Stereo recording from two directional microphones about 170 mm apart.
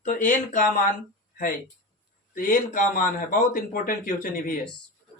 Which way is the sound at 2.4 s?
55° left (ahead or behind).